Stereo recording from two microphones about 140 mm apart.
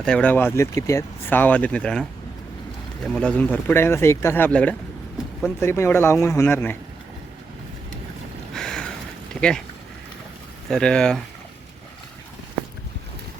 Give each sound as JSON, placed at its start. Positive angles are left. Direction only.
{"t": 0.0, "sound": "speech", "side_deg": 10}
{"t": 8.5, "sound": "a sound", "side_deg": 5}
{"t": 9.3, "sound": "speech", "side_deg": 5}
{"t": 10.7, "sound": "speech", "side_deg": 5}